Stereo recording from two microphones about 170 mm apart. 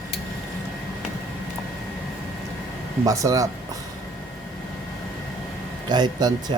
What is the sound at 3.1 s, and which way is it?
Speech, 20° right (ahead or behind).